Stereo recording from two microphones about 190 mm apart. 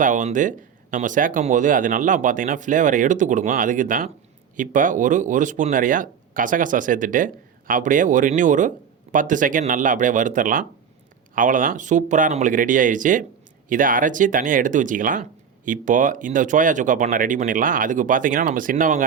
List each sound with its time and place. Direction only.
0.0 s speech: 40° right (ahead or behind)